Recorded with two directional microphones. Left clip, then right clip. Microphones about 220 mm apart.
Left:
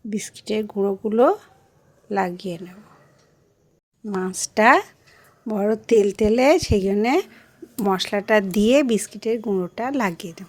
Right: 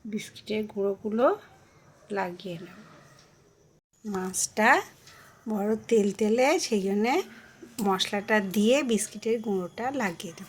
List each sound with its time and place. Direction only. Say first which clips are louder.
0.1 s speech: left 7 dB; 45° left (ahead or behind)
4.0 s speech: left 5 dB; 45° left (ahead or behind)